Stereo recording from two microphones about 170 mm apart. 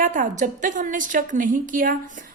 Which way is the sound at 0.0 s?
50° right (ahead or behind).